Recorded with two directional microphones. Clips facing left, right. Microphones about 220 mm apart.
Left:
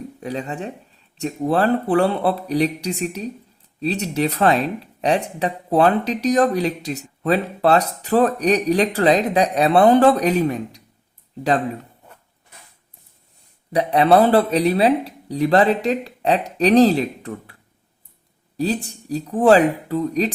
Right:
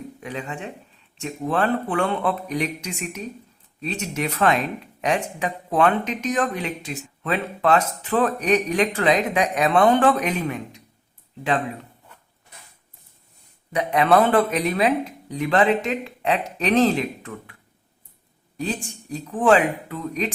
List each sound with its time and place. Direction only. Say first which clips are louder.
0.2 s speech: left 5 dB; 35° left (ahead or behind)
13.7 s speech: left 3 dB; 35° left (ahead or behind)